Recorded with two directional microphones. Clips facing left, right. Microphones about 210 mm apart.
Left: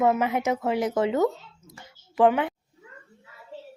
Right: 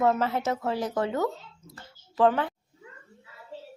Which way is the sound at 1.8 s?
15° left (ahead or behind).